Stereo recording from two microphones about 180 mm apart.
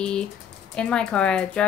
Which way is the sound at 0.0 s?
5° left (ahead or behind).